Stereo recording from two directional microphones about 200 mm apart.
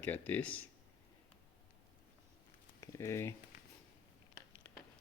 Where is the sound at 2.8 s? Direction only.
15° left (ahead or behind).